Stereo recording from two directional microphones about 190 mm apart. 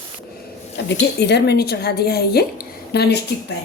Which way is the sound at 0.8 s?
65° left (ahead or behind).